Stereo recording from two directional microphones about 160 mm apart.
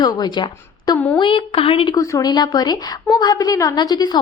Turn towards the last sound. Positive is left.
turn(degrees=25)  # may be behind; listen again after turning